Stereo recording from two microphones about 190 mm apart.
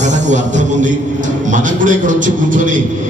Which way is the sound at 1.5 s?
40° right (ahead or behind).